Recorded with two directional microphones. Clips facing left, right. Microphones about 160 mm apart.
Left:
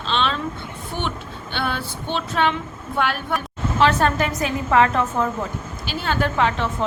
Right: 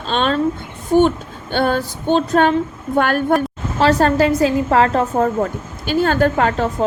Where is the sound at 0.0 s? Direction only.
45° right (ahead or behind).